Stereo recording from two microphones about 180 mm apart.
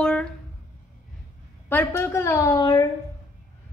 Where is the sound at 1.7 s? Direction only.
15° left (ahead or behind).